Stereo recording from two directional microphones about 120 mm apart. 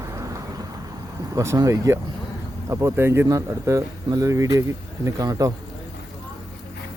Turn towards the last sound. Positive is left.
turn(degrees=-30)  # may be behind; listen again after turning